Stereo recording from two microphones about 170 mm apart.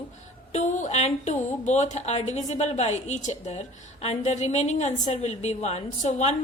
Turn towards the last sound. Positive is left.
turn(degrees=40)  # may be behind; listen again after turning